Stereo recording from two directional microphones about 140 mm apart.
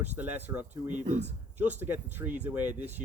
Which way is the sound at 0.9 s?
60° right (ahead or behind).